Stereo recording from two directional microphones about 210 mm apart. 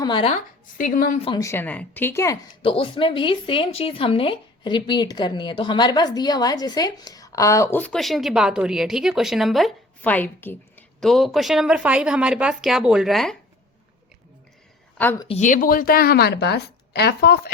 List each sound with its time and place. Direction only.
0.0 s a woman's voice: 25° left (ahead or behind)
0.8 s a woman's voice: 40° left (ahead or behind)
1.2 s speech: 20° left (ahead or behind); by 13.3 s centre (ahead or behind)
15.2 s speech: 30° left (ahead or behind); by 17.5 s 50° left (ahead or behind)